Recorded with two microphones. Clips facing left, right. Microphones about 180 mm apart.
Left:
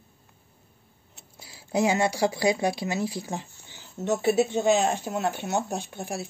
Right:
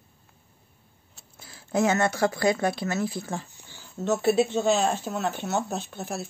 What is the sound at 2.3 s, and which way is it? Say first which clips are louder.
Speech: even; 15° left (ahead or behind).